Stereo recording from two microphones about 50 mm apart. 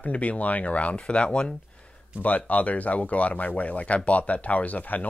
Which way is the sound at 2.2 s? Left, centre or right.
Left.